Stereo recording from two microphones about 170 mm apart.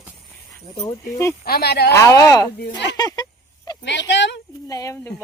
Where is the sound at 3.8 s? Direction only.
90° left.